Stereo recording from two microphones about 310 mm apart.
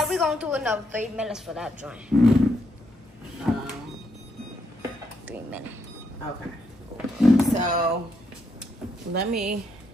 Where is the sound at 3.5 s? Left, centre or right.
Centre.